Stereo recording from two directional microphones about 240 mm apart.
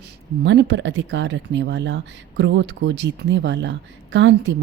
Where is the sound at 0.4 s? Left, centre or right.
Right.